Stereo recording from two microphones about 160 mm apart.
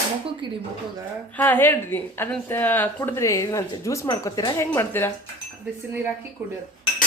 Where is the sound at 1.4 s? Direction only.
10° left (ahead or behind).